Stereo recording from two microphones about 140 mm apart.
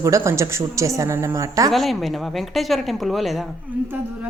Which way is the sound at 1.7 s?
Centre (ahead or behind).